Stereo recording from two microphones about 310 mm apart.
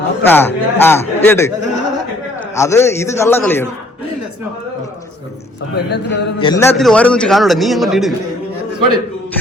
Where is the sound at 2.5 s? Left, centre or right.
Centre.